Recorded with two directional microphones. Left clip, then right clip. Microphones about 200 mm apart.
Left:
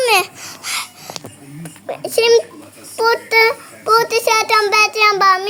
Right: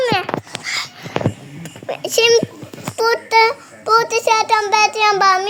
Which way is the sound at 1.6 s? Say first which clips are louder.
Right 1 dB; 5° left (ahead or behind).